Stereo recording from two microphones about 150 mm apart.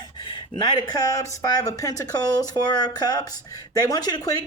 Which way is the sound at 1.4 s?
25° left (ahead or behind).